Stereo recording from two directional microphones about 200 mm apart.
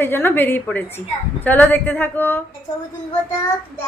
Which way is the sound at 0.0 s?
10° left (ahead or behind).